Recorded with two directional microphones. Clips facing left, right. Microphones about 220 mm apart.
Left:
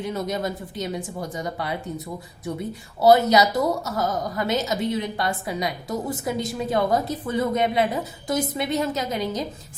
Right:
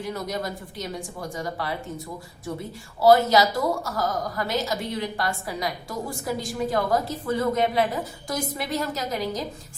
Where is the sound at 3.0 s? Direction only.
20° left (ahead or behind).